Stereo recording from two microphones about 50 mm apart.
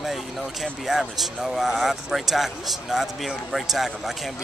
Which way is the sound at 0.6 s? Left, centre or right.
Centre.